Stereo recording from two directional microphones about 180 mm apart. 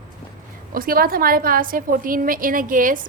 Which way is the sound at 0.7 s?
55° right (ahead or behind).